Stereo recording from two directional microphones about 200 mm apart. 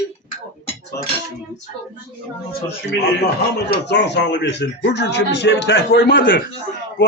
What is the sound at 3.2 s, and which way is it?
A man's voice, 55° left (ahead or behind).